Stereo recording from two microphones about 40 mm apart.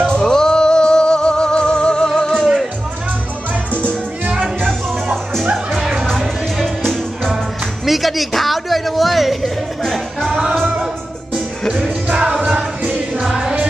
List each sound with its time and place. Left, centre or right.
0.0 s music: centre
5.7 s music: centre
6.0 s music: centre
7.8 s music: centre
11.7 s music: centre
13.3 s music: centre